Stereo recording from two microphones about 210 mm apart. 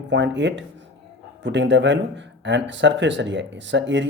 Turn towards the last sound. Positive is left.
turn(degrees=-55)  # may be behind; listen again after turning